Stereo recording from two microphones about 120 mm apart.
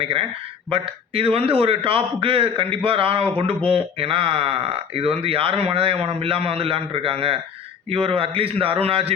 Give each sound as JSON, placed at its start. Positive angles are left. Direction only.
{"t": 0.0, "sound": "a man's voice", "side_deg": -50}